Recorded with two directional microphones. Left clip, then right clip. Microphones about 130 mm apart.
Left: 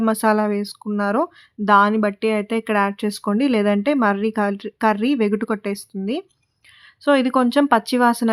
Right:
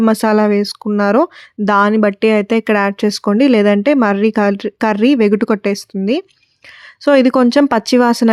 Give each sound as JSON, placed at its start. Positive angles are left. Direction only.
{"t": 0.0, "sound": "speech", "side_deg": -55}
{"t": 7.0, "sound": "speech", "side_deg": -55}